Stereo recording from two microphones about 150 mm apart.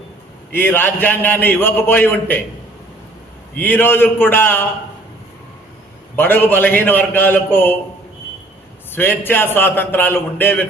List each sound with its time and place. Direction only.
0.5 s a man's voice: 15° left (ahead or behind)
3.6 s a man's voice: 15° left (ahead or behind)
6.1 s a man's voice: 10° left (ahead or behind)
9.0 s a man's voice: 15° left (ahead or behind)